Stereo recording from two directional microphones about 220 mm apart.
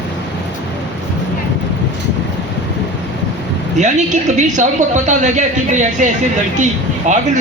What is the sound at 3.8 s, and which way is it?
A woman's voice, 35° right (ahead or behind).